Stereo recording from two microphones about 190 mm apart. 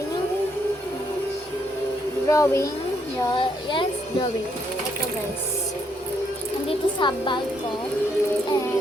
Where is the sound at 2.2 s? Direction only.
15° left (ahead or behind).